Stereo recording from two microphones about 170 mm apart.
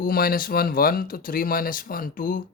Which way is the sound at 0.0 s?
60° left (ahead or behind).